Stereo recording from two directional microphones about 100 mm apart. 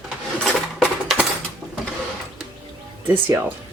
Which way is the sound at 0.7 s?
10° right (ahead or behind).